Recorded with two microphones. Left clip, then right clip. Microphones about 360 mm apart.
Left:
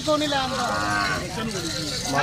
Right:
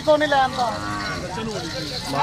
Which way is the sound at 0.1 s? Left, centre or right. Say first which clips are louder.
Right 6 dB; centre.